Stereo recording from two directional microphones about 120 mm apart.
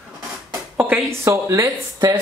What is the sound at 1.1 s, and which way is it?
Speech, 20° right (ahead or behind).